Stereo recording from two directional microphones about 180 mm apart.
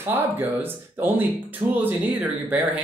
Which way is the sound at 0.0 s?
10° right (ahead or behind).